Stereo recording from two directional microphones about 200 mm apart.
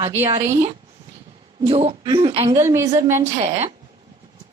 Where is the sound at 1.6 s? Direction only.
30° right (ahead or behind); by 3.3 s 15° right (ahead or behind).